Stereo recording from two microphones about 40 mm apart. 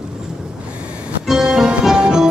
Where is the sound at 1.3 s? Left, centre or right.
Centre.